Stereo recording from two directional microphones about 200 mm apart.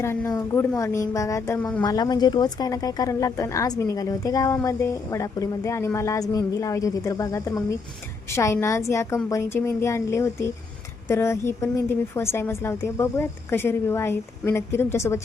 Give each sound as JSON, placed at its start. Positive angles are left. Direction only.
{"t": 0.0, "sound": "speech", "side_deg": 10}
{"t": 1.8, "sound": "speech", "side_deg": 20}